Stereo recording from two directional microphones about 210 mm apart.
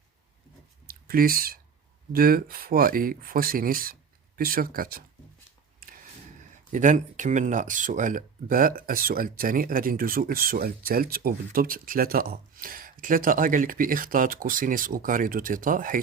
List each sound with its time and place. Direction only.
0.9 s speech: 45° right (ahead or behind)
6.7 s speech: 35° right (ahead or behind)